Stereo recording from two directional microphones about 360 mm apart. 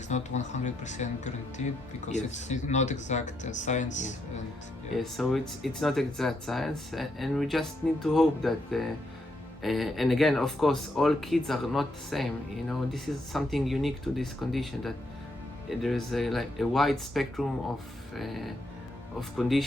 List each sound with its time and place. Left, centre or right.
0.1 s speech: centre
4.9 s speech: centre